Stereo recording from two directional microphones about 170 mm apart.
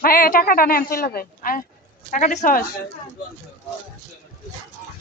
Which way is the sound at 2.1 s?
45° left (ahead or behind).